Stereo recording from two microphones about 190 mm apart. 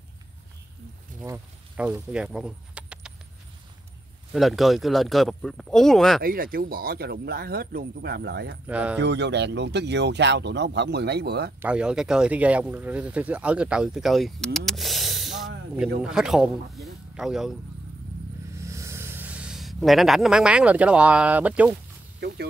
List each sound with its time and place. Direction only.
1.2 s speech: 10° right (ahead or behind)
4.3 s speech: centre (ahead or behind)
6.2 s speech: 50° right (ahead or behind)
8.6 s speech: 5° right (ahead or behind)
9.0 s speech: 65° right (ahead or behind)
11.6 s a man's voice: 5° right (ahead or behind)
18.6 s speech: 15° right (ahead or behind)